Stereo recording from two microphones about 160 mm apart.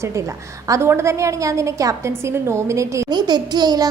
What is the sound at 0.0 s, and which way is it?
A woman's voice, 20° right (ahead or behind).